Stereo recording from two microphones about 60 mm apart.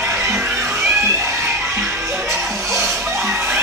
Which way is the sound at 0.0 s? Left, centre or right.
Centre.